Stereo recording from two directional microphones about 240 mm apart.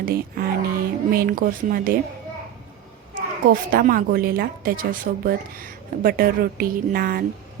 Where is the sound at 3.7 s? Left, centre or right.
Right.